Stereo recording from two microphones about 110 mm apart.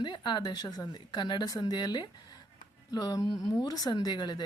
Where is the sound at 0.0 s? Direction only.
45° left (ahead or behind).